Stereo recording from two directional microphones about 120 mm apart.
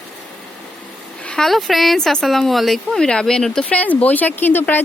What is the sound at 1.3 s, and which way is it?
Speech, 5° left (ahead or behind).